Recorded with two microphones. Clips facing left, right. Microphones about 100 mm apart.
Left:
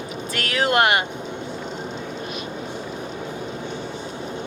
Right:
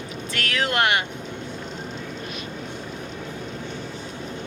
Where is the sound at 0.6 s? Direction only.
10° left (ahead or behind).